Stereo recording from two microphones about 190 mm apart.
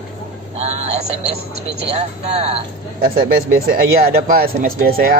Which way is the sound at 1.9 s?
35° right (ahead or behind).